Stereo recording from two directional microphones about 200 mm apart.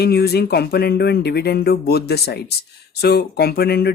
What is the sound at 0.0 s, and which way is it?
Speech, 55° left (ahead or behind).